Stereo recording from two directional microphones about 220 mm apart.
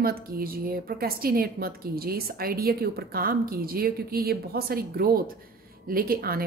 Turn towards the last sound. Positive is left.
turn(degrees=-40)  # may be behind; listen again after turning